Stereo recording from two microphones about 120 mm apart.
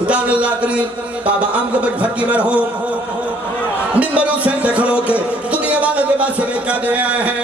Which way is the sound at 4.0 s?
10° right (ahead or behind).